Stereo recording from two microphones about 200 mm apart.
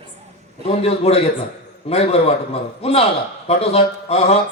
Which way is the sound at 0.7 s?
30° left (ahead or behind).